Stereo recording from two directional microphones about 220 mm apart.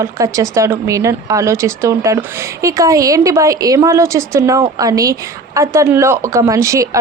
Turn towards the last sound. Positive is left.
turn(degrees=-15)  # may be behind; listen again after turning